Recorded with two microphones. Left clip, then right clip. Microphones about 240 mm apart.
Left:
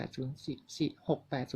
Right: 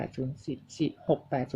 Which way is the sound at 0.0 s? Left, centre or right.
Left.